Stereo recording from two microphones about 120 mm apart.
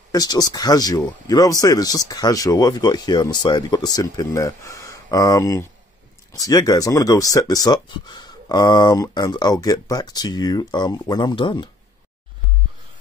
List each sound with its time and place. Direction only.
0.1 s speech: 35° left (ahead or behind)